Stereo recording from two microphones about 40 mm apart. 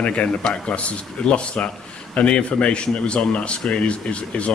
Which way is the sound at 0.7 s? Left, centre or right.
Left.